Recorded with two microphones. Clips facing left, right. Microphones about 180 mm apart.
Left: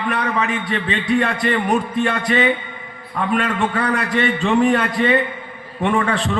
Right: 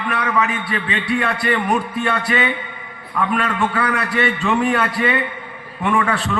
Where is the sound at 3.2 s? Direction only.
35° left (ahead or behind).